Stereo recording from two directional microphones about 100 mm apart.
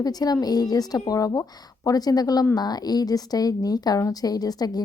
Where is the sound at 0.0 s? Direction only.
40° left (ahead or behind).